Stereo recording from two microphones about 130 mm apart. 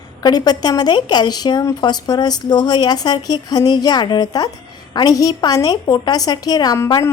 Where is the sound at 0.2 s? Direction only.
30° left (ahead or behind).